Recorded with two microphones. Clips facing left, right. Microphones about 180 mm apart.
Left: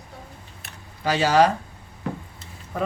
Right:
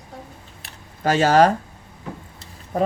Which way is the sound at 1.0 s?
45° right (ahead or behind).